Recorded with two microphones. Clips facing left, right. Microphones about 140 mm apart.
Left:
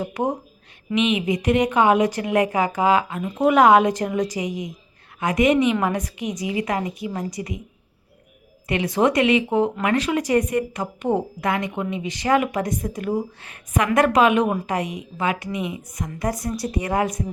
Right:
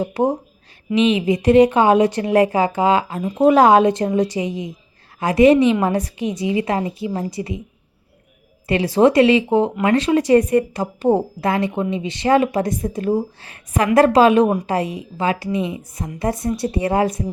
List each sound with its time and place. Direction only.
0.0 s a woman's voice: 30° right (ahead or behind)
8.6 s a woman's voice: 30° right (ahead or behind)